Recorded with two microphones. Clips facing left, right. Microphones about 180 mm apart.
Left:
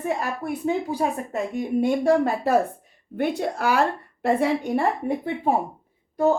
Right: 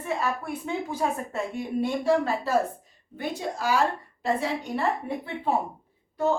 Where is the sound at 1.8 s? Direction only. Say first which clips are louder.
Left 4 dB; 55° left (ahead or behind).